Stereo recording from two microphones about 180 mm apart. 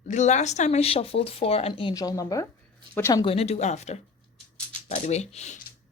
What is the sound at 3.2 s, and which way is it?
Speech, 35° left (ahead or behind).